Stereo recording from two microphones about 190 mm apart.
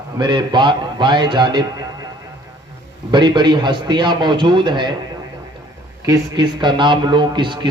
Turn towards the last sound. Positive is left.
turn(degrees=-25)  # may be behind; listen again after turning